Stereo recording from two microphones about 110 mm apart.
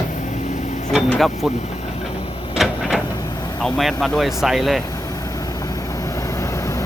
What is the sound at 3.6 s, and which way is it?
Speech, centre (ahead or behind).